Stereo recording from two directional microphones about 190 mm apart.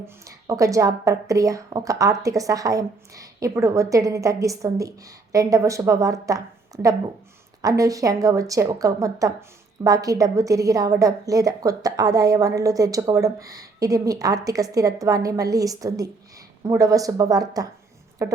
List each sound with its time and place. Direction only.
0.0 s a woman's voice: 15° right (ahead or behind)